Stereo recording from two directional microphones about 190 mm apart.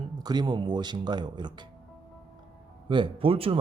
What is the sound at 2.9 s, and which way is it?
Speech, 25° right (ahead or behind).